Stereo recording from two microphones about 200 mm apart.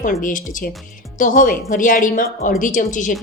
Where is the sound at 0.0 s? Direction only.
40° left (ahead or behind).